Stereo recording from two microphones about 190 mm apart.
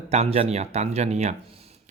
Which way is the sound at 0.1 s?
35° right (ahead or behind).